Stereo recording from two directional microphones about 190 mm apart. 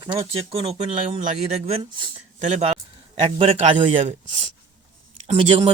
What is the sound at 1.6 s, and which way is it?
Speech, 30° right (ahead or behind).